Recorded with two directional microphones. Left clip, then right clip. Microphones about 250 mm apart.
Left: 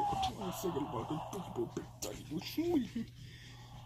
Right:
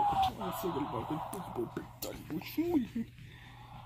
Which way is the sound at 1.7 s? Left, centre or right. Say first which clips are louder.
Right 1 dB; centre.